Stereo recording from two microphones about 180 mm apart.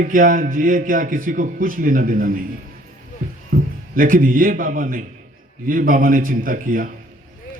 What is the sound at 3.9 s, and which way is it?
A man's voice, 50° right (ahead or behind).